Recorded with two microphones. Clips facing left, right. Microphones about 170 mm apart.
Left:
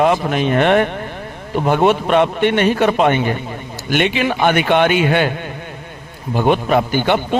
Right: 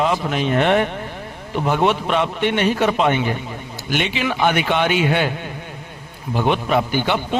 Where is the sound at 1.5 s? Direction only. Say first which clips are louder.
Left 4 dB; 50° left (ahead or behind).